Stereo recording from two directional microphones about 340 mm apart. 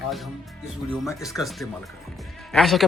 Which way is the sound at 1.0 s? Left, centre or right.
Centre.